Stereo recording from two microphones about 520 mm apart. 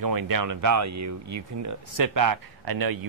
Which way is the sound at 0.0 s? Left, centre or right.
Right.